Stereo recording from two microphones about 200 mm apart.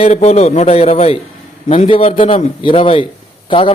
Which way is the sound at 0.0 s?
35° left (ahead or behind).